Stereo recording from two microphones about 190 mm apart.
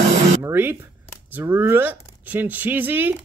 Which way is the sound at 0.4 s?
10° right (ahead or behind).